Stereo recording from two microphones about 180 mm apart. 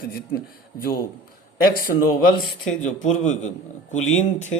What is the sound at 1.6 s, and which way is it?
Speech, 55° left (ahead or behind).